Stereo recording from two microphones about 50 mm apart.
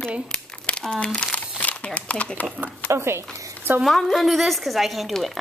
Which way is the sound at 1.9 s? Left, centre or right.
Left.